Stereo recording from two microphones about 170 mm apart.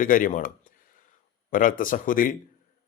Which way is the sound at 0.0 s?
50° left (ahead or behind).